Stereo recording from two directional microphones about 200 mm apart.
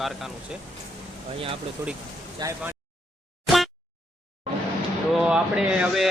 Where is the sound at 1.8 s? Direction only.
15° right (ahead or behind).